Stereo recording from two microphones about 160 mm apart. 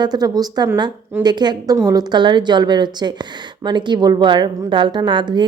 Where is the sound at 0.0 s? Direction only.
25° right (ahead or behind).